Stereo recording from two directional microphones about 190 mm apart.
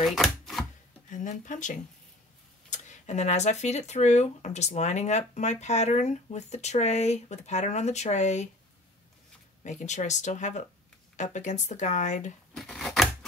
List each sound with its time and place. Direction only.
0.0 s chopping: centre (ahead or behind)
1.1 s speech: 40° left (ahead or behind)
9.6 s speech: 40° left (ahead or behind)
12.5 s a sound: centre (ahead or behind)